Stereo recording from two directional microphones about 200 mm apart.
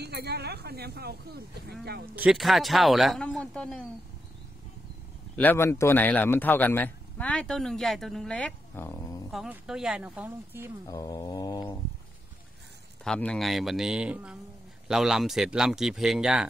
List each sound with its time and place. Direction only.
0.0 s speech: 55° right (ahead or behind)
2.1 s speech: 5° right (ahead or behind)
5.3 s speech: 10° left (ahead or behind)
9.3 s speech: centre (ahead or behind)
10.9 s mantra: 20° left (ahead or behind)
13.0 s speech: 5° left (ahead or behind)